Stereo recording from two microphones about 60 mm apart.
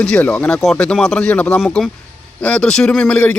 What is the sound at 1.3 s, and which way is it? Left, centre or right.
A man's voice, left.